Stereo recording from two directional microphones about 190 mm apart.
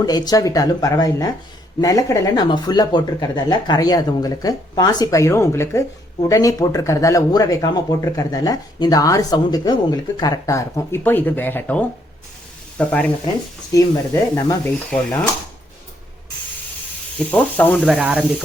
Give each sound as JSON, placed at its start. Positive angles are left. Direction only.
{"t": 0.0, "sound": "speech", "side_deg": 20}
{"t": 13.7, "sound": "speech", "side_deg": 20}
{"t": 17.3, "sound": "speech", "side_deg": 10}
{"t": 17.8, "sound": "speech", "side_deg": -5}